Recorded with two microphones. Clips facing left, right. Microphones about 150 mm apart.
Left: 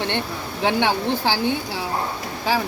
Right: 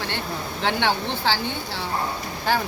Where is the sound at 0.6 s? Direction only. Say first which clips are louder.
Left 4 dB; 15° left (ahead or behind).